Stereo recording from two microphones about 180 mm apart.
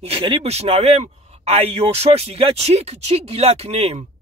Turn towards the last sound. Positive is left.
turn(degrees=-35)  # may be behind; listen again after turning